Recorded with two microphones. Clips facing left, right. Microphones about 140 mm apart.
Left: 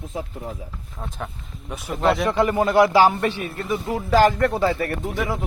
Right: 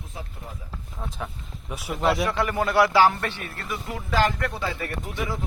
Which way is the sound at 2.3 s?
20° left (ahead or behind).